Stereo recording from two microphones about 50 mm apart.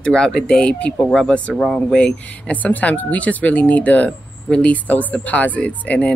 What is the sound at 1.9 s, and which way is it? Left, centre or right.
Speech, left.